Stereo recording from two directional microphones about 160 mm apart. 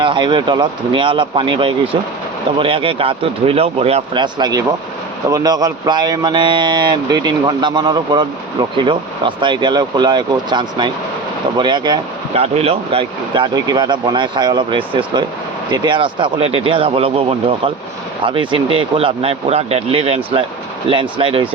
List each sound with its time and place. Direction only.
0.0 s speech: 30° right (ahead or behind)
12.3 s speech: 40° right (ahead or behind)